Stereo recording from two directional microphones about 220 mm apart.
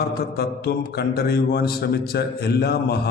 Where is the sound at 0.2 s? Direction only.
45° left (ahead or behind).